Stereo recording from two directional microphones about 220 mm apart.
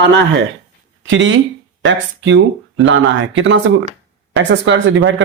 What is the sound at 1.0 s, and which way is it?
Speech, 60° right (ahead or behind).